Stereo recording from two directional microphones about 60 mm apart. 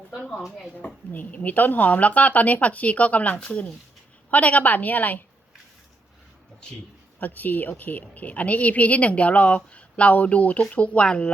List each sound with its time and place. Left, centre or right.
1.1 s a woman's voice: left
7.2 s a woman's voice: left